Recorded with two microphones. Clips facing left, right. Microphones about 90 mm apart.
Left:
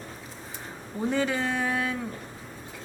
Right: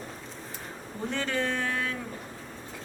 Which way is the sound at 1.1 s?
10° left (ahead or behind).